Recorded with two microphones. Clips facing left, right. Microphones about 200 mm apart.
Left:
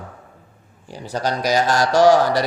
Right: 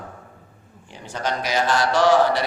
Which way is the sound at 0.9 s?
35° left (ahead or behind).